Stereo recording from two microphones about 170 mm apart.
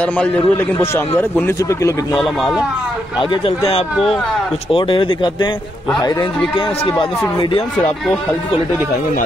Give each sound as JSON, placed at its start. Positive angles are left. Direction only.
{"t": 0.0, "sound": "a man's voice", "side_deg": 5}
{"t": 2.1, "sound": "speech", "side_deg": 0}
{"t": 3.2, "sound": "speech", "side_deg": 35}
{"t": 3.9, "sound": "speech", "side_deg": 0}
{"t": 4.6, "sound": "speech", "side_deg": 30}